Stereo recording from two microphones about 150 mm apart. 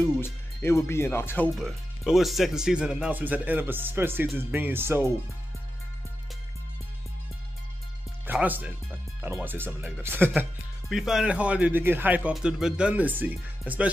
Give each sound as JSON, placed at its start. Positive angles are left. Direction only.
{"t": 0.0, "sound": "speech", "side_deg": 15}
{"t": 1.5, "sound": "speech", "side_deg": 0}
{"t": 8.3, "sound": "speech", "side_deg": -10}
{"t": 10.9, "sound": "speech", "side_deg": 0}